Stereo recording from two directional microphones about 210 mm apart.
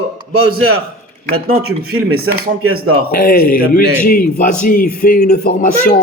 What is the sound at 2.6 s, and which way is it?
Speech, 90° right.